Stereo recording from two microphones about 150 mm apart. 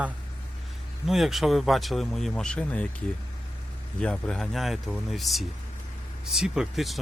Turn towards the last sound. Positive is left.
turn(degrees=-5)  # may be behind; listen again after turning